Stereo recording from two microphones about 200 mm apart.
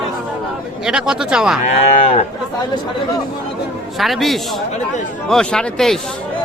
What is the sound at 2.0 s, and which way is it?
Speech, 35° left (ahead or behind).